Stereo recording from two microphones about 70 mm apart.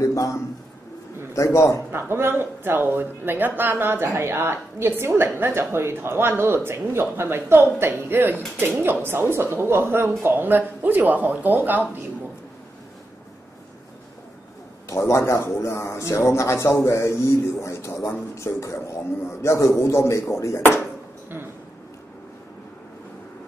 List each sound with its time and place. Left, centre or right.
0.0 s a sound: left
1.3 s a man's voice: left
1.9 s a woman's voice: right
14.9 s a man's voice: left